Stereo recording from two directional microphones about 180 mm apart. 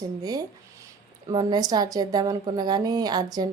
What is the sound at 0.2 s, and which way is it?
A woman's voice, 20° right (ahead or behind).